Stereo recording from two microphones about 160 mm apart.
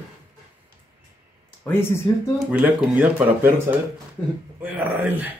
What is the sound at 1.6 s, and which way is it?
Speech, 15° left (ahead or behind).